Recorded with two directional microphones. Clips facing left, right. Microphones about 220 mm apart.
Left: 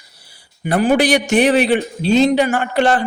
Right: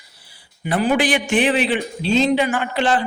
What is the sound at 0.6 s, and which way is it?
A man's voice, 50° left (ahead or behind).